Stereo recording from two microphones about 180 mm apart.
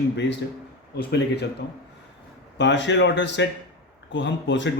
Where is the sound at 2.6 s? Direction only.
80° left.